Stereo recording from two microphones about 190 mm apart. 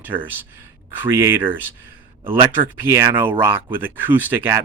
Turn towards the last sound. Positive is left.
turn(degrees=-10)  # may be behind; listen again after turning